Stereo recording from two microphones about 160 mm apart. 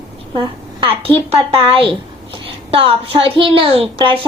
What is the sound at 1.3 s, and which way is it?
A child's voice, 35° right (ahead or behind).